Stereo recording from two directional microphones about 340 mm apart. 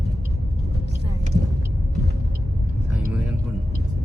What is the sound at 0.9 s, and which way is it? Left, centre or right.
Vehicle, right.